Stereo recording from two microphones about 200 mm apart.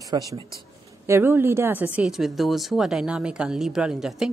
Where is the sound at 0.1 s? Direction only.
20° right (ahead or behind).